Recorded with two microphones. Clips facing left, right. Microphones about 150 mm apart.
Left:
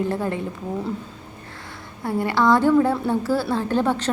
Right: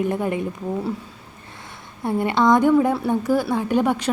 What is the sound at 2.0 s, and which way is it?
A woman's voice, 20° right (ahead or behind).